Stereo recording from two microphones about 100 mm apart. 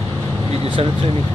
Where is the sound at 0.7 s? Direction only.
65° right (ahead or behind).